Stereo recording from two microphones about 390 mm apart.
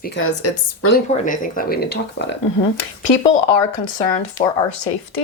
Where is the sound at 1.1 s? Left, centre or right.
Left.